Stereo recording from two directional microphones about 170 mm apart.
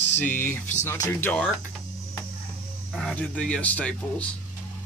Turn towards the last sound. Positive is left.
turn(degrees=10)  # may be behind; listen again after turning